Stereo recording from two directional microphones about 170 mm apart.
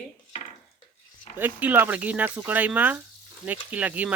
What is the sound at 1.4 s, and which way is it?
Speech, 10° right (ahead or behind).